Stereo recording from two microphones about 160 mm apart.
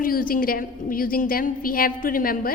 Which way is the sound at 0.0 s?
65° left (ahead or behind).